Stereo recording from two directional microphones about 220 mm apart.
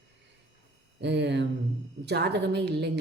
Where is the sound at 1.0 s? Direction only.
50° right (ahead or behind).